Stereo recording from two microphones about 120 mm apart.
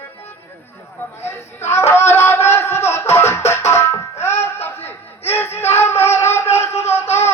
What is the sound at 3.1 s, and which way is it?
Music, 20° left (ahead or behind).